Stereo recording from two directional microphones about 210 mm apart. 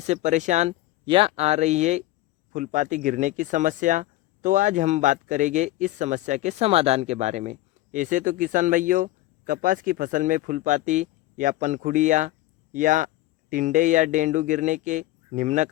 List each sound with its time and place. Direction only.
0.0 s speech: 35° right (ahead or behind)